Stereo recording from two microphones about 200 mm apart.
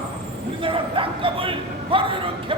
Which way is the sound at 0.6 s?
25° right (ahead or behind).